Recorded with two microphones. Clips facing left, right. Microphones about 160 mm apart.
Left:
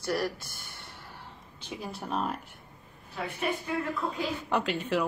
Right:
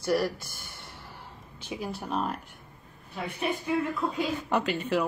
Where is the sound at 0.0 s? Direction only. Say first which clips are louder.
Right 4 dB; 15° right (ahead or behind).